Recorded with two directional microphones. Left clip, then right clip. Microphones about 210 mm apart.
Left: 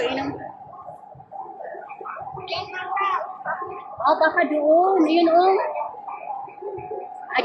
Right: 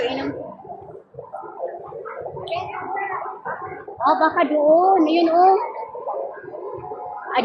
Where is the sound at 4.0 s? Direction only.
20° right (ahead or behind).